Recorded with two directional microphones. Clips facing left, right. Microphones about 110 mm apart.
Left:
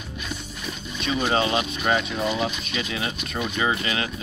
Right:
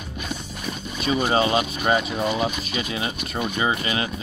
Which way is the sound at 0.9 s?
45° right (ahead or behind).